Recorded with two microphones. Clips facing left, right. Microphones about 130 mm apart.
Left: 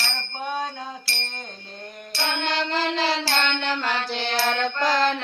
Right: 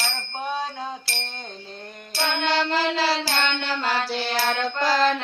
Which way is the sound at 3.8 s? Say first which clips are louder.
Right 2 dB; 10° right (ahead or behind).